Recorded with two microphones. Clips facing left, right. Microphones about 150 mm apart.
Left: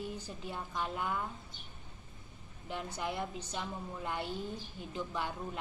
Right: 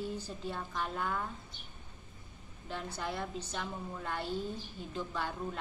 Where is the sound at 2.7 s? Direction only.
15° left (ahead or behind).